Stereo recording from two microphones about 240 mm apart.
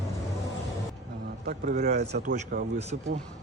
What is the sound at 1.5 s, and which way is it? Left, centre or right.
Speech, right.